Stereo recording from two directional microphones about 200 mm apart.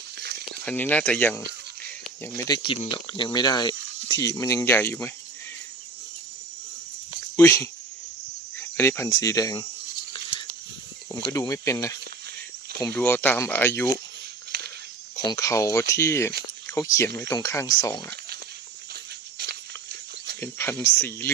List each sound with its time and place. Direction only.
0.2 s a sound: 55° right (ahead or behind)
0.6 s speech: 10° left (ahead or behind)
2.2 s speech: 20° left (ahead or behind)
7.3 s speech: 15° left (ahead or behind)
11.3 s speech: 15° left (ahead or behind)
13.0 s speech: 10° left (ahead or behind)
15.1 s speech: 15° left (ahead or behind)
20.4 s speech: 10° left (ahead or behind)